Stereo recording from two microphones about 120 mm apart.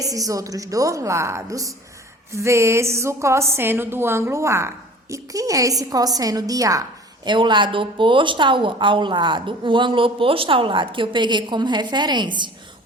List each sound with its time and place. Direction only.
0.0 s a woman's voice: 30° right (ahead or behind)
7.3 s a woman's voice: 40° right (ahead or behind)